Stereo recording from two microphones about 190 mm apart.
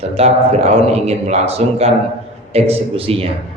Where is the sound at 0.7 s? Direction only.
35° right (ahead or behind).